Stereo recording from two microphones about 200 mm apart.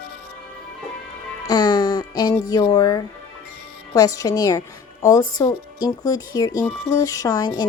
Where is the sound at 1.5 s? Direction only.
20° left (ahead or behind).